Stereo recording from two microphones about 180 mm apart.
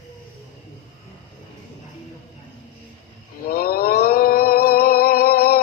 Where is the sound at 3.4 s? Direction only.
55° left (ahead or behind).